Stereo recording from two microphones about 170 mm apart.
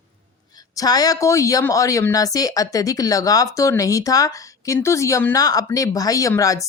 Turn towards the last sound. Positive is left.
turn(degrees=20)  # may be behind; listen again after turning